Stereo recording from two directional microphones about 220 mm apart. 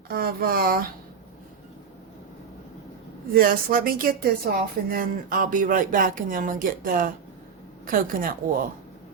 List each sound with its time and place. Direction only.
0.1 s speech: 40° right (ahead or behind)
3.3 s speech: 40° right (ahead or behind)